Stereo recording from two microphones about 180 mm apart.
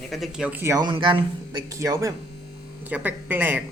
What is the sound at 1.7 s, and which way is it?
Speech, 15° right (ahead or behind).